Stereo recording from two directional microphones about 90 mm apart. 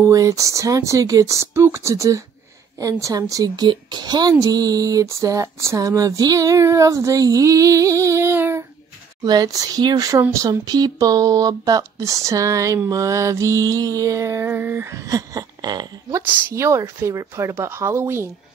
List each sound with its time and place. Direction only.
0.0 s a woman's voice: 35° right (ahead or behind)
9.2 s a woman's voice: 50° right (ahead or behind); by 14.9 s 20° right (ahead or behind)
14.9 s a sound: 40° right (ahead or behind)
16.1 s a woman's voice: 30° right (ahead or behind)